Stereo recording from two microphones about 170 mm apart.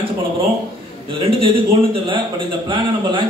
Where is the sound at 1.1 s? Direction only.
30° right (ahead or behind).